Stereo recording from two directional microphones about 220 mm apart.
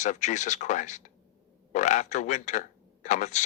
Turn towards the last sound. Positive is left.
turn(degrees=35)  # may be behind; listen again after turning